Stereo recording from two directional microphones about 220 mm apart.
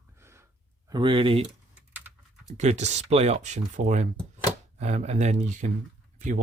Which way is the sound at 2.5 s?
30° right (ahead or behind).